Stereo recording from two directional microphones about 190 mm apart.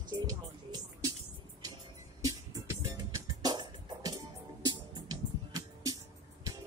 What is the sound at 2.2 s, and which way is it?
Music, 15° right (ahead or behind).